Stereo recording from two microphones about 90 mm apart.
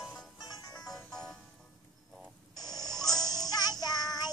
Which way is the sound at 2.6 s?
45° left (ahead or behind).